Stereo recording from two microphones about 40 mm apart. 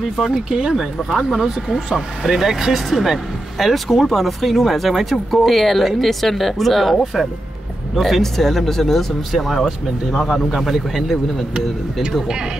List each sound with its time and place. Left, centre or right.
0.3 s speech: centre